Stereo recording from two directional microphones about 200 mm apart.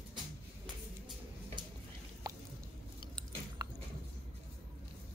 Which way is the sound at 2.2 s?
20° right (ahead or behind).